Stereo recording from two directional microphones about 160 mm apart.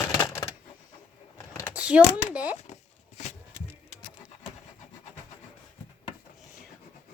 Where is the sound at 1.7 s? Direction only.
10° right (ahead or behind).